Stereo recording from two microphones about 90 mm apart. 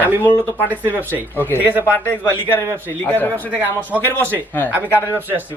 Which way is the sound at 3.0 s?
20° left (ahead or behind).